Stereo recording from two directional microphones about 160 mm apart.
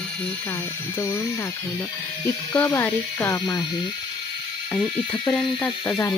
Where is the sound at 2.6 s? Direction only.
10° left (ahead or behind).